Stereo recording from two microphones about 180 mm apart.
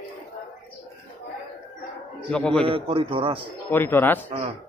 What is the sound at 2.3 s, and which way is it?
Speech, 5° left (ahead or behind).